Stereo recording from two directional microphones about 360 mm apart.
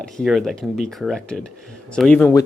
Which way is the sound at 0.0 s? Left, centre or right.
Centre.